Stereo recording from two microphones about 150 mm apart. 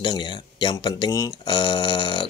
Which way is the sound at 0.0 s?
30° left (ahead or behind).